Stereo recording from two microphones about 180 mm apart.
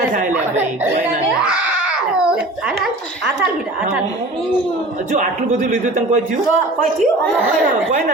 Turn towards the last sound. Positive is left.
turn(degrees=-45)  # may be behind; listen again after turning